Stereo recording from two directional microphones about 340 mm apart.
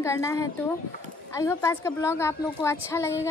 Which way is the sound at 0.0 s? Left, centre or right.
Centre.